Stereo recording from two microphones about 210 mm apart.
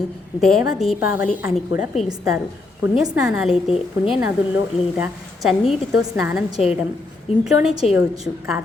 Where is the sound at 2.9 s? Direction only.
5° right (ahead or behind).